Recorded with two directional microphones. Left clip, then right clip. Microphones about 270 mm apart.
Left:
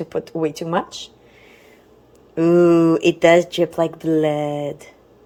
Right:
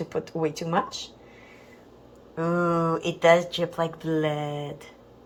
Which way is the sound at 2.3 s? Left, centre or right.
Left.